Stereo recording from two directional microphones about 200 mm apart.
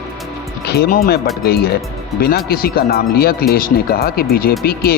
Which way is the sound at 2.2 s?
50° left (ahead or behind).